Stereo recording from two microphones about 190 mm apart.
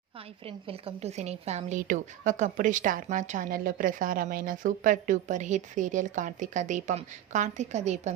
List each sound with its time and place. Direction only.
0.4 s a woman's voice: 30° right (ahead or behind)